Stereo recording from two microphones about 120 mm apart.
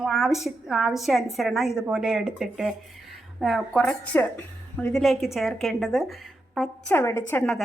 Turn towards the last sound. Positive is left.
turn(degrees=15)  # may be behind; listen again after turning